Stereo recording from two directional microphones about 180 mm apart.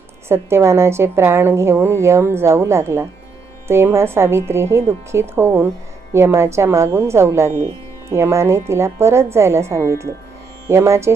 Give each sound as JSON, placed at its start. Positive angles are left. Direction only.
{"t": 0.3, "sound": "a woman's voice", "side_deg": -15}